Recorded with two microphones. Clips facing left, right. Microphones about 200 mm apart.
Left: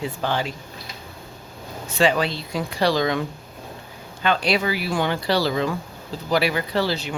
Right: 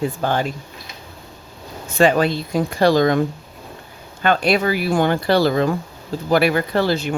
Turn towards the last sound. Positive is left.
turn(degrees=-50)  # may be behind; listen again after turning